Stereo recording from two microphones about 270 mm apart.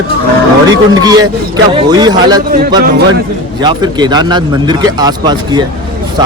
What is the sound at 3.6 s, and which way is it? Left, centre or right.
Speech, centre.